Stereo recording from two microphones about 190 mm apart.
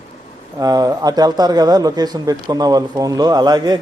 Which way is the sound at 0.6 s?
20° right (ahead or behind).